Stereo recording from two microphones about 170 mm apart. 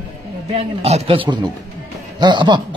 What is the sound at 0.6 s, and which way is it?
A man's voice, 40° right (ahead or behind).